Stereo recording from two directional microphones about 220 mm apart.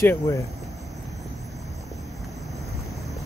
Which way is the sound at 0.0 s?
10° left (ahead or behind).